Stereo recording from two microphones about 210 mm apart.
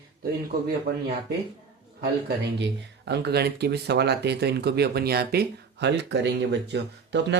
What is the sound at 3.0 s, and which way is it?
Speech, 50° right (ahead or behind).